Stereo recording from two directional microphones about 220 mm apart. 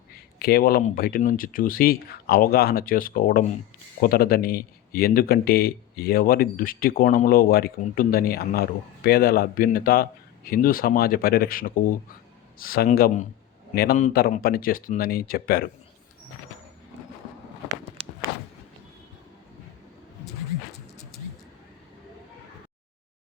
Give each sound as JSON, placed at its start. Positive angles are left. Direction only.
{"t": 0.3, "sound": "speech", "side_deg": 45}